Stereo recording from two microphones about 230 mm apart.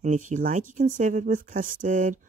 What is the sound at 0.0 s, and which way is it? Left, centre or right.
Speech, right.